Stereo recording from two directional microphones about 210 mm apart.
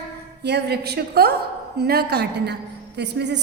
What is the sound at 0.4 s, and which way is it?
A woman's voice, 50° right (ahead or behind).